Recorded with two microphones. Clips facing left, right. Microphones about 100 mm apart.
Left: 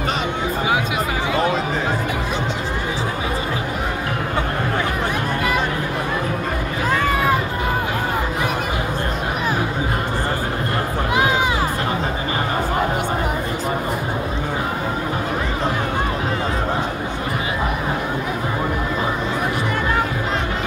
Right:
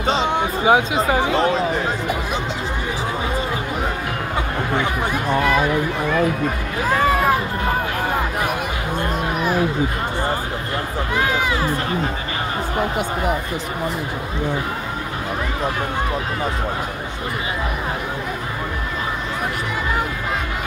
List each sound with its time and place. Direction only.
0.7 s speech: 30° right (ahead or behind)